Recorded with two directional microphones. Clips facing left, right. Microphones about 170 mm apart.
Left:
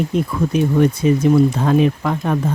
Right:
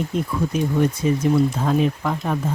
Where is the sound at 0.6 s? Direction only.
70° left (ahead or behind).